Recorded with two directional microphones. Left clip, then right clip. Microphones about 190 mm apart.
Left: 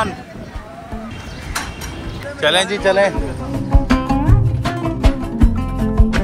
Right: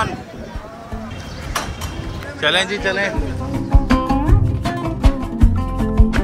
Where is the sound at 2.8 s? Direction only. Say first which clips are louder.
Left 6 dB; 5° left (ahead or behind).